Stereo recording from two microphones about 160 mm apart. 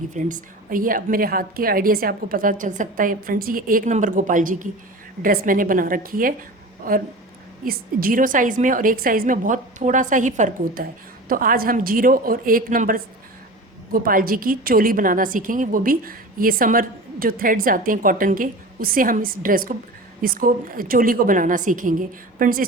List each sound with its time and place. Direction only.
0.1 s a woman's voice: 55° right (ahead or behind)
11.3 s a woman's voice: 60° right (ahead or behind)